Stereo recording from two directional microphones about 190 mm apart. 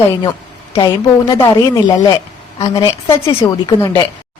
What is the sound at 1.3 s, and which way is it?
Speech, 15° left (ahead or behind).